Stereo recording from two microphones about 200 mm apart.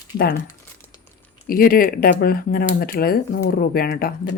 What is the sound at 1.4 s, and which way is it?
Speech, 45° left (ahead or behind).